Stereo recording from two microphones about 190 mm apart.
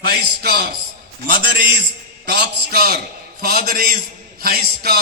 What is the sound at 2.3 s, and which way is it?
A man's voice, 55° right (ahead or behind).